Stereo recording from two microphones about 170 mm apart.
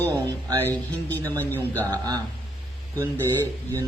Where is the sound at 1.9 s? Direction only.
25° right (ahead or behind).